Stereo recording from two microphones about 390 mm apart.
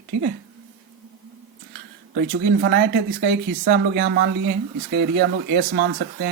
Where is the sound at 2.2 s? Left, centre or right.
Right.